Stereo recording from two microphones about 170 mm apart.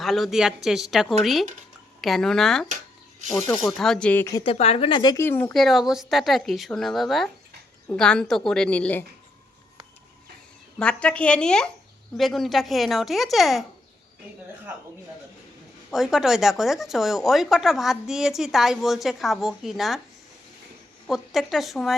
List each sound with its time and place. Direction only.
0.0 s speech: centre (ahead or behind)
2.6 s a sound: 45° right (ahead or behind)
3.5 s speech: centre (ahead or behind)
4.4 s speech: 35° left (ahead or behind)
5.1 s speech: 15° left (ahead or behind)
10.8 s speech: 5° left (ahead or behind)
15.9 s speech: centre (ahead or behind)
21.1 s speech: centre (ahead or behind)